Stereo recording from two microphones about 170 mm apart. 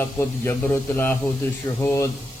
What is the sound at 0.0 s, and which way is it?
Speech, 15° left (ahead or behind).